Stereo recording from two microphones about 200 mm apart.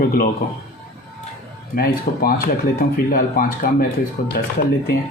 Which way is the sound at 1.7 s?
45° left (ahead or behind).